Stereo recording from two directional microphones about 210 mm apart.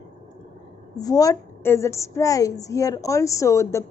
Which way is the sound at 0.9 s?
15° left (ahead or behind).